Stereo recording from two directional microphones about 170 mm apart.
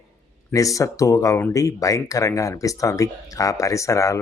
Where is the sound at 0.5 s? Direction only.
20° left (ahead or behind).